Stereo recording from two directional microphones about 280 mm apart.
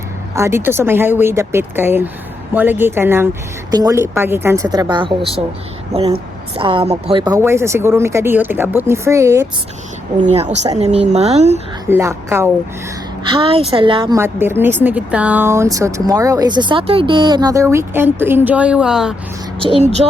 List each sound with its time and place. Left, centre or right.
0.3 s a woman's voice: centre
10.3 s a woman's voice: right
11.9 s a woman's voice: centre
19.5 s a woman's voice: centre